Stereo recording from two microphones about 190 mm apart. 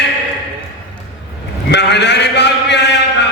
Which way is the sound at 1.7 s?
65° left (ahead or behind).